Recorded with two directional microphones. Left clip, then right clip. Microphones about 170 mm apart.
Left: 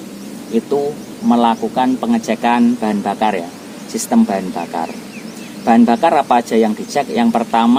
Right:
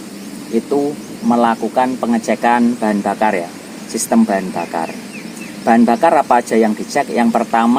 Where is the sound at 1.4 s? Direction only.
15° right (ahead or behind).